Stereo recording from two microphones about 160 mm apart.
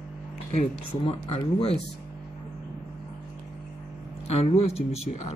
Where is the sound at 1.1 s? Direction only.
35° left (ahead or behind).